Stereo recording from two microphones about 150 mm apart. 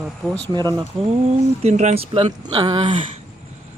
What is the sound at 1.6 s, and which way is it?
Speech, 50° right (ahead or behind).